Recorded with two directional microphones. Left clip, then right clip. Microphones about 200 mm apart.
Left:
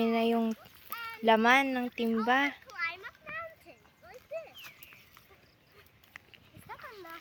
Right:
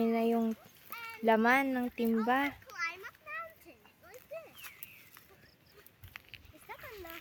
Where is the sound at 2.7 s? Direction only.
60° right (ahead or behind).